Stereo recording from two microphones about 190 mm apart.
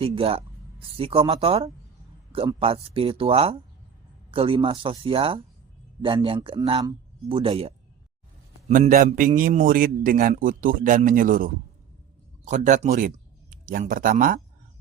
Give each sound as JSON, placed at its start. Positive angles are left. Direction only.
{"t": 0.0, "sound": "speech", "side_deg": -30}
{"t": 8.7, "sound": "a man's voice", "side_deg": -45}